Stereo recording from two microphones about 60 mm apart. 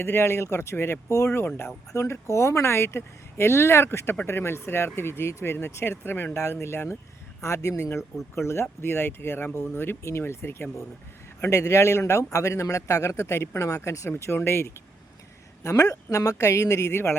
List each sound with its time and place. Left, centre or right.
0.0 s speech: left
7.4 s a man's voice: left
14.3 s speech: left
15.6 s a man's voice: left